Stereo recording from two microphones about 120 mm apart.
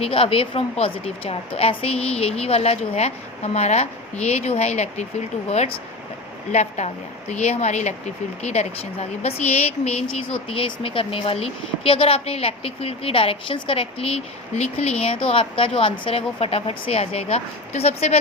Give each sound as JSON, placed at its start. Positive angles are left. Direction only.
{"t": 0.0, "sound": "a woman's voice", "side_deg": 50}
{"t": 10.5, "sound": "a woman's voice", "side_deg": 50}
{"t": 15.3, "sound": "a woman's voice", "side_deg": 50}